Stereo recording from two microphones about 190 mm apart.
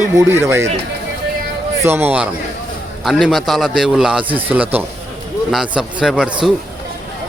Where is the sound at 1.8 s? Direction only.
10° right (ahead or behind).